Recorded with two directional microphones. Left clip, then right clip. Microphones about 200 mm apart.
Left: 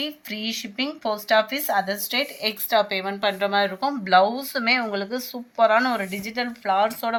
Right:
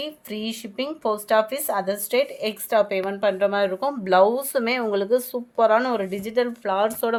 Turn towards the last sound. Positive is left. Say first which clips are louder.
# left 1 dB
turn(degrees=-60)  # may be behind; listen again after turning